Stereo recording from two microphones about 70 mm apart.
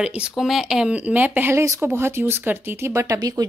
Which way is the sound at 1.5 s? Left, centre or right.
Right.